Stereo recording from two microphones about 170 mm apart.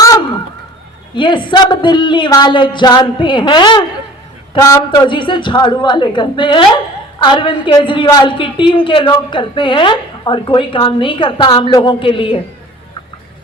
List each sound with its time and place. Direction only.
1.1 s a woman's voice: 30° left (ahead or behind)